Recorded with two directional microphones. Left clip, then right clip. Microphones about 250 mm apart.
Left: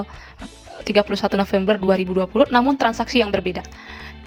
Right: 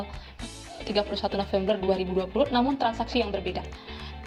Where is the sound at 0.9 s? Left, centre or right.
Left.